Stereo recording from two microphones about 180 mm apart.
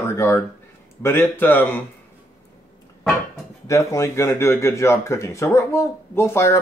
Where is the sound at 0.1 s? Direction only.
15° left (ahead or behind).